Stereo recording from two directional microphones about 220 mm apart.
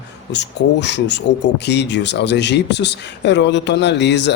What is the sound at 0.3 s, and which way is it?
Speech, 50° left (ahead or behind).